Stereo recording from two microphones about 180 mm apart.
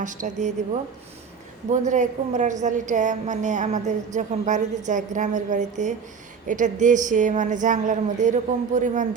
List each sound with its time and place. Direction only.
0.0 s a woman's voice: 45° right (ahead or behind)
1.7 s a woman's voice: 45° right (ahead or behind)